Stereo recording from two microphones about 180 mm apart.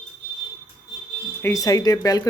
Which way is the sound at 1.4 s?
15° left (ahead or behind).